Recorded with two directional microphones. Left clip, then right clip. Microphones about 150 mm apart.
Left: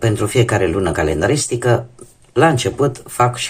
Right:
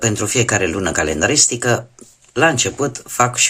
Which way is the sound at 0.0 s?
25° right (ahead or behind).